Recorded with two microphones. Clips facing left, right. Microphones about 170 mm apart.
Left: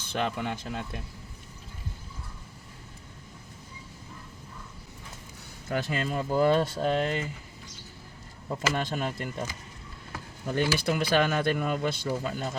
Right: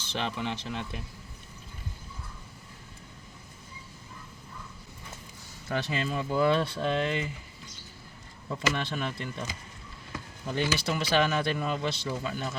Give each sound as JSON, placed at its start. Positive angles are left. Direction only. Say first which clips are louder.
{"t": 0.1, "sound": "speech", "louder": "left 2 dB", "side_deg": 50}
{"t": 5.6, "sound": "speech", "louder": "left 1 dB", "side_deg": 45}
{"t": 8.4, "sound": "speech", "louder": "left 1 dB", "side_deg": 45}